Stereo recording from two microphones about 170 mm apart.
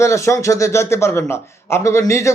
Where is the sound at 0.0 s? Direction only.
15° left (ahead or behind).